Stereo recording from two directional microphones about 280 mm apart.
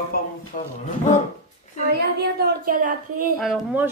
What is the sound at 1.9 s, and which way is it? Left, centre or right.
A woman's voice, right.